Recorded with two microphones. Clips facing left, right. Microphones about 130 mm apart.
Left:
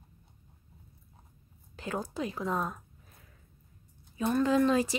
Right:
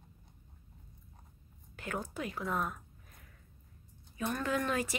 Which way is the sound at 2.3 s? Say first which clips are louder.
Left 2 dB; 20° left (ahead or behind).